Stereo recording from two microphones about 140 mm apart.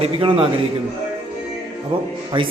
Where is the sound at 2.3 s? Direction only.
40° right (ahead or behind).